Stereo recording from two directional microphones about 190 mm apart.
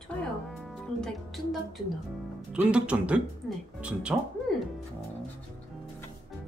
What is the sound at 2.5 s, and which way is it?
Speech, 5° right (ahead or behind).